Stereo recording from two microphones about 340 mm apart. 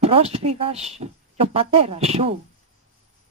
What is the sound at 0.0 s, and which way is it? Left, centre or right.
Speech, centre.